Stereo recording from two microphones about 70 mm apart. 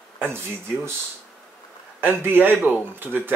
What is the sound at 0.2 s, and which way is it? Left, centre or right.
Speech, right.